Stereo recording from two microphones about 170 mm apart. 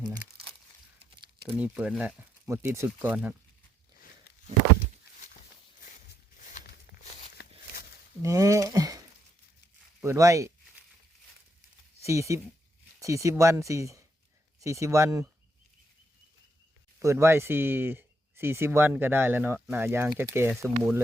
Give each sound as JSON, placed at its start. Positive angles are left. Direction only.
{"t": 1.5, "sound": "speech", "side_deg": -10}
{"t": 5.8, "sound": "walk", "side_deg": 55}
{"t": 8.2, "sound": "a sound", "side_deg": -20}
{"t": 10.0, "sound": "speech", "side_deg": -15}
{"t": 12.0, "sound": "speech", "side_deg": -15}
{"t": 17.0, "sound": "speech", "side_deg": -15}